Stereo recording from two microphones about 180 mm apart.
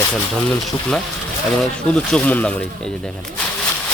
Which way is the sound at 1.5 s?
5° left (ahead or behind).